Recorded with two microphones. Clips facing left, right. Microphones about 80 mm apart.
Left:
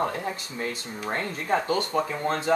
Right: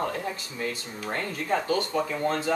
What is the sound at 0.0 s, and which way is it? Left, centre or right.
Speech, left.